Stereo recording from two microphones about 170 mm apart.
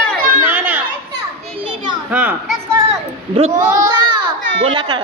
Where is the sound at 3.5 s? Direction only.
20° right (ahead or behind).